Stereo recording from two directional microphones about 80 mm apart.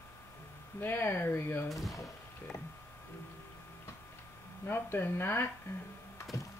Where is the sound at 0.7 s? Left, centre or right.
Left.